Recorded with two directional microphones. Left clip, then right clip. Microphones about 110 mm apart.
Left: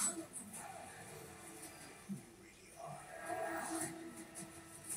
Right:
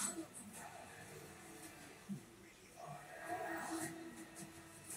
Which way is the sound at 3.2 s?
25° left (ahead or behind).